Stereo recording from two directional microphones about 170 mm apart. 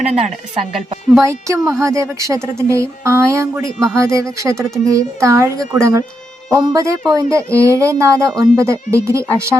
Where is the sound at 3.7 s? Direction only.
Centre (ahead or behind).